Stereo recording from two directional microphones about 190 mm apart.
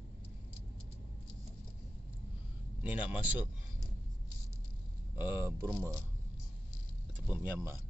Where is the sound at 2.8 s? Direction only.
10° right (ahead or behind).